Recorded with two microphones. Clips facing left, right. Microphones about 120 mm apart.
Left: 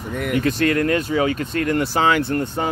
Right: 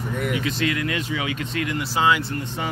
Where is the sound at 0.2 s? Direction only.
50° left (ahead or behind).